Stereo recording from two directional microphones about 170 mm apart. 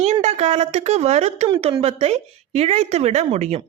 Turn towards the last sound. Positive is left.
turn(degrees=-40)  # may be behind; listen again after turning